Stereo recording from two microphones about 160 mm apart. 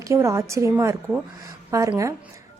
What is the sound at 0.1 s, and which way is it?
A woman's voice, 20° right (ahead or behind).